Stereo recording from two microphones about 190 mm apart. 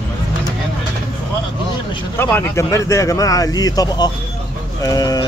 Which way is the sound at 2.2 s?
10° left (ahead or behind).